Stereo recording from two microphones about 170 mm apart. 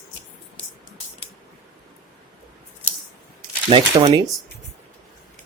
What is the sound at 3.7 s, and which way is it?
Speech, 25° right (ahead or behind).